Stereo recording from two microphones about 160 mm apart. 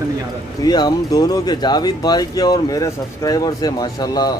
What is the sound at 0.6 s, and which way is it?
Speech, 25° left (ahead or behind).